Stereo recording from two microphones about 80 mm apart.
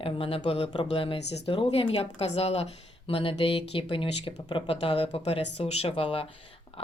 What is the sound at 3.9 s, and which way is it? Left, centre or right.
Speech, left.